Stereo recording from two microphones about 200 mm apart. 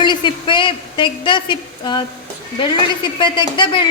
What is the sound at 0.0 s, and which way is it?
A woman's voice, 25° left (ahead or behind).